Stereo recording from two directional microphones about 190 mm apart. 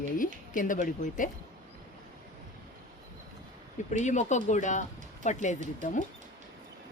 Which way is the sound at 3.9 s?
40° left (ahead or behind).